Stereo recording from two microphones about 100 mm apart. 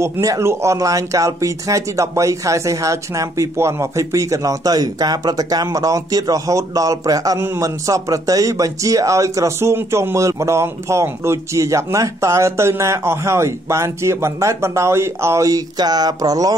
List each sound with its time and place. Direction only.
0.0 s a man's voice: 30° right (ahead or behind)